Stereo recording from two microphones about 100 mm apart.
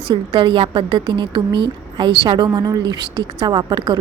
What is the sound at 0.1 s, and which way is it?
A woman's voice, 55° right (ahead or behind).